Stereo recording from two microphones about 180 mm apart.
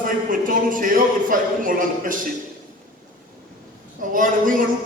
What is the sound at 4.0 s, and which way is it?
Speech, 45° right (ahead or behind).